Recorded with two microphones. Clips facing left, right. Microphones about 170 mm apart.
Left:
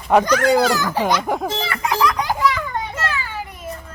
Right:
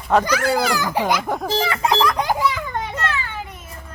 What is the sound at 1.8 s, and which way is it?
Music, 30° right (ahead or behind).